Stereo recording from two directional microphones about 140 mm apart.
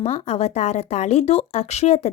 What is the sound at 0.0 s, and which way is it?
A woman's voice, 50° left (ahead or behind).